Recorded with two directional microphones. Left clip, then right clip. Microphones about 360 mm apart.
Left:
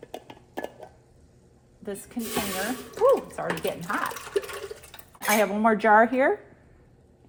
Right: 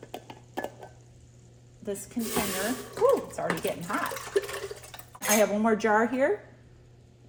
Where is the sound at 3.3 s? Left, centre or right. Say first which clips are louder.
Left 1 dB; centre.